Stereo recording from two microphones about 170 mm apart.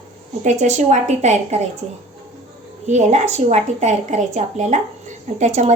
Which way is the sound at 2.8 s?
45° right (ahead or behind).